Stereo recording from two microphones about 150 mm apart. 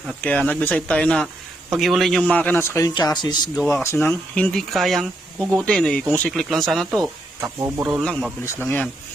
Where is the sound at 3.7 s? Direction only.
15° left (ahead or behind).